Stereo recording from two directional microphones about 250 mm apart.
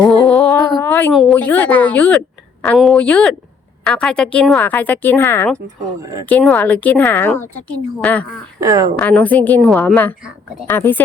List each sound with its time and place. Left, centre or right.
0.1 s music: centre
0.7 s a woman's voice: centre
8.6 s speech: centre
9.0 s a woman's voice: centre